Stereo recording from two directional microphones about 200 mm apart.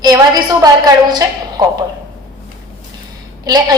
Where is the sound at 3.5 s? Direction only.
20° right (ahead or behind).